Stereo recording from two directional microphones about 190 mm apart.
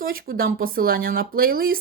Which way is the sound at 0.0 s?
50° right (ahead or behind).